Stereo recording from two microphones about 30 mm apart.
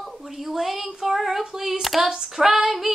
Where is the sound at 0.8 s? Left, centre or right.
Centre.